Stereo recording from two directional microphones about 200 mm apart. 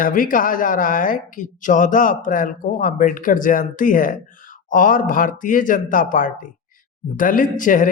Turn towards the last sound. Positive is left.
turn(degrees=40)  # may be behind; listen again after turning